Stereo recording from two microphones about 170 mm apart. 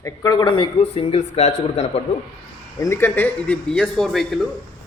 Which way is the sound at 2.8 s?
15° left (ahead or behind).